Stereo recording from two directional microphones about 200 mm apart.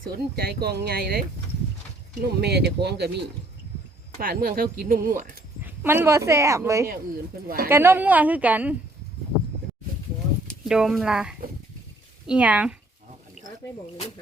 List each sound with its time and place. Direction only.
0.1 s speech: 50° right (ahead or behind)
2.2 s speech: 55° right (ahead or behind)
4.2 s speech: 50° right (ahead or behind)
5.6 s a woman's voice: 10° right (ahead or behind)
7.4 s speech: 50° right (ahead or behind)
7.7 s a woman's voice: 10° right (ahead or behind)
10.4 s speech: centre (ahead or behind)